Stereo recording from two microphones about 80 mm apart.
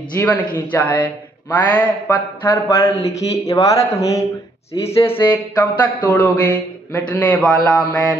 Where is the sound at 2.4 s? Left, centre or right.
Left.